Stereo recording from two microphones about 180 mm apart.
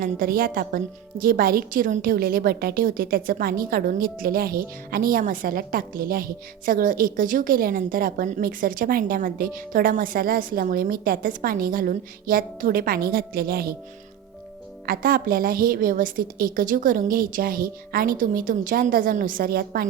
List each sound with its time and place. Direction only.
0.0 s a woman's voice: 55° right (ahead or behind)
14.8 s a woman's voice: 55° right (ahead or behind)